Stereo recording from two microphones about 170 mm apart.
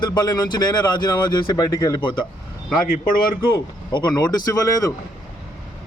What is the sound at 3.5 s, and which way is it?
A man's voice, 25° left (ahead or behind).